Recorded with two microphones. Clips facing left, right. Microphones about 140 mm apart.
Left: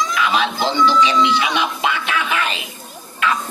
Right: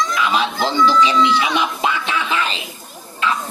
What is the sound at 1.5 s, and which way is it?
Quack, 30° right (ahead or behind).